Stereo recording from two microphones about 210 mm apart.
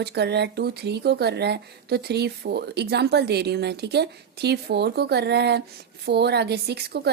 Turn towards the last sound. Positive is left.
turn(degrees=-50)  # may be behind; listen again after turning